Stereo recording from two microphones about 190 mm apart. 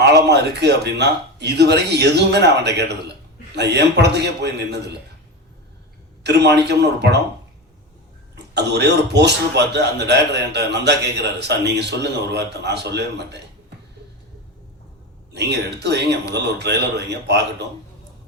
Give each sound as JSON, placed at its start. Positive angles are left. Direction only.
{"t": 0.3, "sound": "a man's voice", "side_deg": -60}
{"t": 6.7, "sound": "a man's voice", "side_deg": -60}
{"t": 8.5, "sound": "a man's voice", "side_deg": -65}
{"t": 15.3, "sound": "a man's voice", "side_deg": -60}